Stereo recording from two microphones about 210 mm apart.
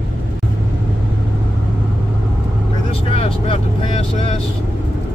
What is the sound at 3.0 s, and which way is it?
Vehicle, 25° left (ahead or behind).